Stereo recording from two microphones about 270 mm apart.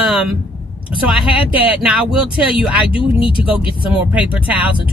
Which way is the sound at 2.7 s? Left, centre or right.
Centre.